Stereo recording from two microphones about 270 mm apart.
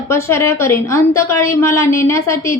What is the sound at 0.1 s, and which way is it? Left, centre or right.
A woman's voice, centre.